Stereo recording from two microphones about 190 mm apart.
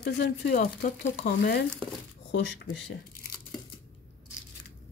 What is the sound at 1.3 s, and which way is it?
Speech, 55° left (ahead or behind).